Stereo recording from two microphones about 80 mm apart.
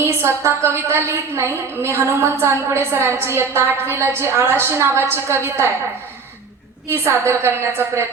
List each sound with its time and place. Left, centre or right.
0.0 s a woman's voice: right
6.9 s a woman's voice: right